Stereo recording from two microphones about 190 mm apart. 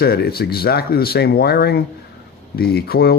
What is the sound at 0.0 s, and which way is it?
Speech, 55° left (ahead or behind).